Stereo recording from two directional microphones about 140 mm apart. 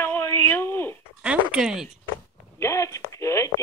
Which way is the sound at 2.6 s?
20° left (ahead or behind).